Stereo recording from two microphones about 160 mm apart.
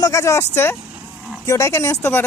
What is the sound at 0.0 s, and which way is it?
Speech, 20° left (ahead or behind).